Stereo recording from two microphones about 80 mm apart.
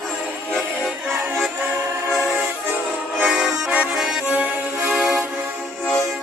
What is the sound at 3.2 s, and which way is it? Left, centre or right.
Accordion, centre.